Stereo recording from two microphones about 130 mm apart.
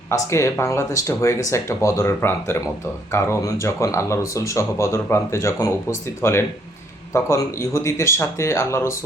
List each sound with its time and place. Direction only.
0.1 s speech: 20° left (ahead or behind)